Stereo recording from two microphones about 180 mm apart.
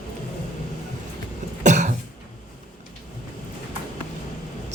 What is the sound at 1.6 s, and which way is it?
Cough, 40° right (ahead or behind).